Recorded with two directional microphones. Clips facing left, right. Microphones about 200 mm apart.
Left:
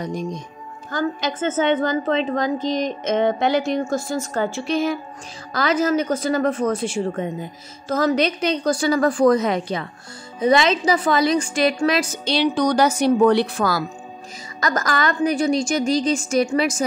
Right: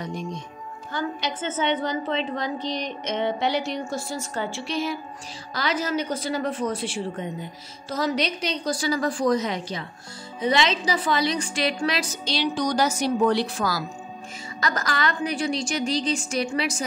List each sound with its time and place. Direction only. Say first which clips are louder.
0.0 s a woman's voice: left 5 dB; 40° left (ahead or behind); by 13.8 s 60° left (ahead or behind)
14.6 s a woman's voice: left 4 dB; 45° left (ahead or behind)